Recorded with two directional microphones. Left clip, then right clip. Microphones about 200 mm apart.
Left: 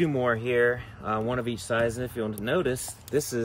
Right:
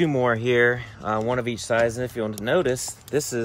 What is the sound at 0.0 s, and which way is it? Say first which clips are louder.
Speech: right 4 dB; 30° right (ahead or behind).